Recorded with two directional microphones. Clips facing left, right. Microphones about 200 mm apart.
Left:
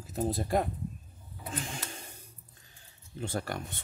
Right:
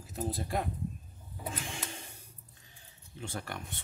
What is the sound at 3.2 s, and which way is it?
Speech, 40° left (ahead or behind).